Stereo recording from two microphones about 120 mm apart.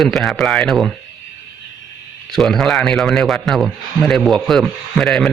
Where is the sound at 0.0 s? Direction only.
Centre (ahead or behind).